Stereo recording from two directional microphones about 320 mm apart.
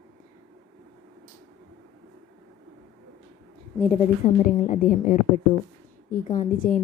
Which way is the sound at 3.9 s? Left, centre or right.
Left.